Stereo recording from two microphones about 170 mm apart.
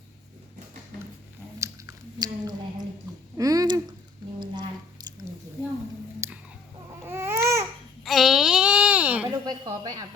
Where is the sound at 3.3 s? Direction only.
20° right (ahead or behind).